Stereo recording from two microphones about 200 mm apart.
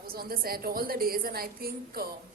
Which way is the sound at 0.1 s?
50° right (ahead or behind).